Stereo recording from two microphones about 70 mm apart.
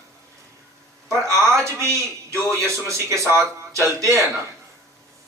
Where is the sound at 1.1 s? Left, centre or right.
Right.